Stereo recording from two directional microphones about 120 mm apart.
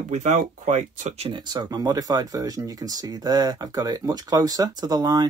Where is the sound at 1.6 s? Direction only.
30° right (ahead or behind).